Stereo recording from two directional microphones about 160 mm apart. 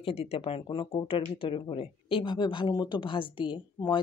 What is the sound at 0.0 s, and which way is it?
Speech, 40° left (ahead or behind).